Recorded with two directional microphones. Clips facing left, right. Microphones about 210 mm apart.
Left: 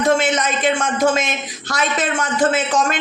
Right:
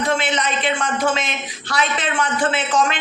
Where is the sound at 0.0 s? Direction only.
45° left (ahead or behind).